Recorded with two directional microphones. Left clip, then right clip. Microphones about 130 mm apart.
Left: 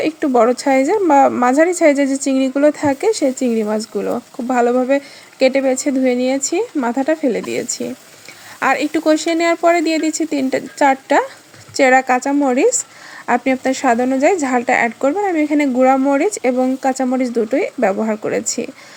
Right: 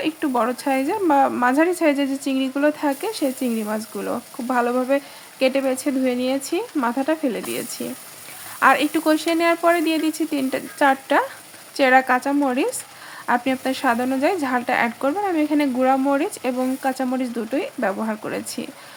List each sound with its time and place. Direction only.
0.0 s speech: 30° left (ahead or behind)
12.3 s speech: 15° left (ahead or behind)
13.2 s speech: 25° left (ahead or behind)